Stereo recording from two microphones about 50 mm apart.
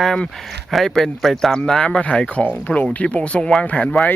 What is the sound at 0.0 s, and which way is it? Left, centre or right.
Speech, centre.